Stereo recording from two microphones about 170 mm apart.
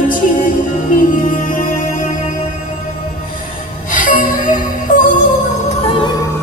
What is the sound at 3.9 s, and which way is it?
Music, 55° left (ahead or behind).